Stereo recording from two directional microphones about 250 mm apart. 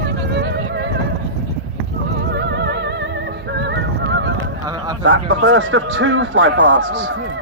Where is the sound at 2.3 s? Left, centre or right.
Right.